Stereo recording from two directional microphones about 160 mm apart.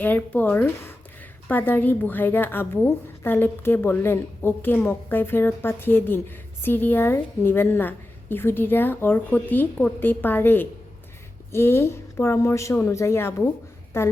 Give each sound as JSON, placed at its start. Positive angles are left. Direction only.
{"t": 0.0, "sound": "a woman's voice", "side_deg": 10}